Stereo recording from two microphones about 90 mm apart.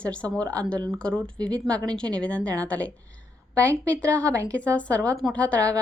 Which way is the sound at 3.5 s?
35° right (ahead or behind).